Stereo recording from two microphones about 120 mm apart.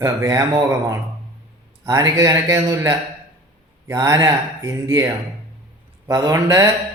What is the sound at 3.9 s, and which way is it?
Speech, 30° right (ahead or behind).